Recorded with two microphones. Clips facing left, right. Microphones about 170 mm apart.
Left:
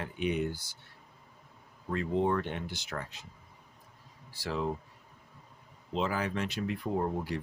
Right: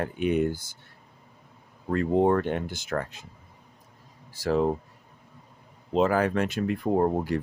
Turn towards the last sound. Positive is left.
turn(degrees=-50)  # may be behind; listen again after turning